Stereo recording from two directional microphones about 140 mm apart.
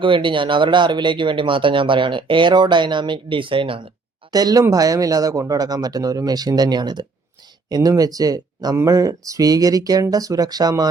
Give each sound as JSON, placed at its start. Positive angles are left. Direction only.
{"t": 0.0, "sound": "speech", "side_deg": -35}
{"t": 4.3, "sound": "speech", "side_deg": -25}